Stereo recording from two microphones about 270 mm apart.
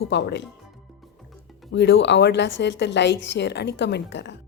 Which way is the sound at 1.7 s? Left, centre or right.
Left.